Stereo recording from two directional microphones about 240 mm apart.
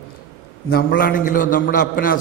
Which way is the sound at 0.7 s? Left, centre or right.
Left.